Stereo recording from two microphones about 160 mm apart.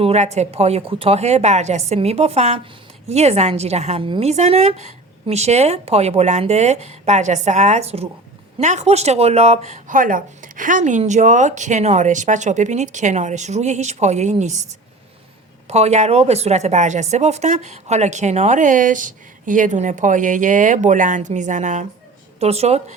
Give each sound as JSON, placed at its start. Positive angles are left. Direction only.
{"t": 0.0, "sound": "a woman's voice", "side_deg": -45}
{"t": 15.6, "sound": "a woman's voice", "side_deg": -45}